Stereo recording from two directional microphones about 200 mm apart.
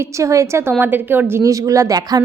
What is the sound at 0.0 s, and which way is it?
A woman's voice, 15° right (ahead or behind).